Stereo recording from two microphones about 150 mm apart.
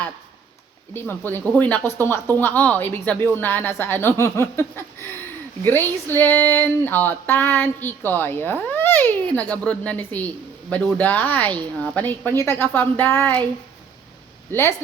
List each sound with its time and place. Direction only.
0.9 s speech: 15° left (ahead or behind)
14.5 s speech: 15° left (ahead or behind)